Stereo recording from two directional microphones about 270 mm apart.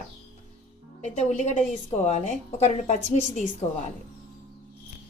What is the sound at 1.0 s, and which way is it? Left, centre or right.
A woman's voice, left.